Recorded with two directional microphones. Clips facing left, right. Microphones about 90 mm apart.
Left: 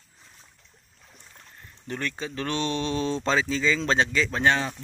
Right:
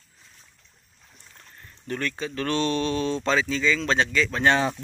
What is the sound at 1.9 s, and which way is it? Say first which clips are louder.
Speech: right 2 dB; 20° left (ahead or behind).